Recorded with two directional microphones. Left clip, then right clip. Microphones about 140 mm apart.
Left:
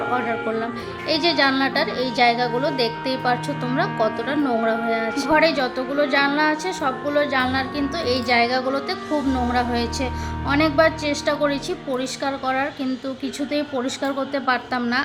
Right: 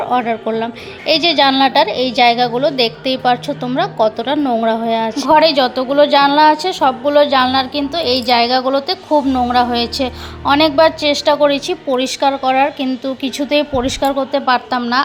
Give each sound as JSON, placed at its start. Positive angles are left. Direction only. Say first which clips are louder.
{"t": 0.1, "sound": "a woman's voice", "louder": "right 6 dB", "side_deg": -30}